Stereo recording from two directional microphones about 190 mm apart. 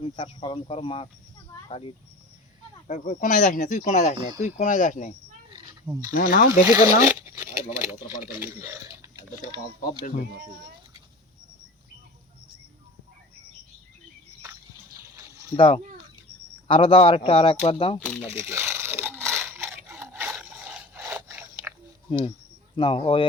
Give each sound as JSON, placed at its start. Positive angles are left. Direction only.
{"t": 0.0, "sound": "speech", "side_deg": 30}
{"t": 2.8, "sound": "speech", "side_deg": 40}
{"t": 5.8, "sound": "speech", "side_deg": -15}
{"t": 6.1, "sound": "speech", "side_deg": 50}
{"t": 6.5, "sound": "speech", "side_deg": -15}
{"t": 15.5, "sound": "speech", "side_deg": 30}
{"t": 18.2, "sound": "a sound", "side_deg": -15}
{"t": 21.0, "sound": "sawing", "side_deg": -10}
{"t": 22.7, "sound": "speech", "side_deg": 25}